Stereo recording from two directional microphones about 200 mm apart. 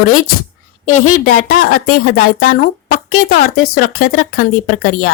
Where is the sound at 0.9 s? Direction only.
90° left.